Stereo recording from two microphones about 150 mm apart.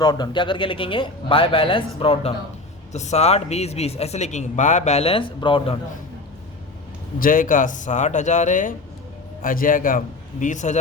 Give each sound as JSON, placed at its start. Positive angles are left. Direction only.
{"t": 0.0, "sound": "a man's voice", "side_deg": 30}
{"t": 2.9, "sound": "speech", "side_deg": 50}
{"t": 7.2, "sound": "speech", "side_deg": 65}
{"t": 9.4, "sound": "speech", "side_deg": 65}
{"t": 10.4, "sound": "speech", "side_deg": 55}